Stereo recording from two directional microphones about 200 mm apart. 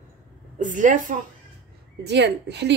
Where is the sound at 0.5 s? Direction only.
40° right (ahead or behind).